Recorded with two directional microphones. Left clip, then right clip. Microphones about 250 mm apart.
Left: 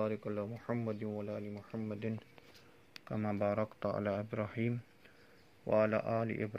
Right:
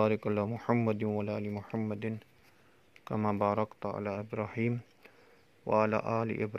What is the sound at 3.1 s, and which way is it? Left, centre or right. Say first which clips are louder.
Speech: right 5 dB; right.